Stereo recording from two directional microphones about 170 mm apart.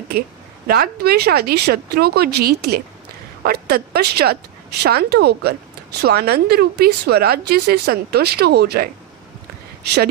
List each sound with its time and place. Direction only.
0.7 s a woman's voice: 65° right (ahead or behind)